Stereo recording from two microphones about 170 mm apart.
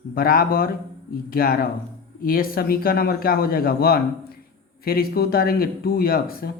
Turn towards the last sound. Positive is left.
turn(degrees=65)  # may be behind; listen again after turning